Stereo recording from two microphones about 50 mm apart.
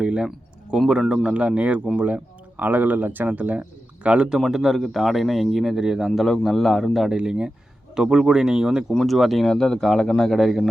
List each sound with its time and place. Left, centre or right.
0.0 s a sound: centre
0.9 s speech: centre
1.3 s speech: right
4.5 s a man's voice: centre
6.1 s speech: centre
7.1 s speech: centre
9.0 s a man's voice: centre
9.6 s speech: centre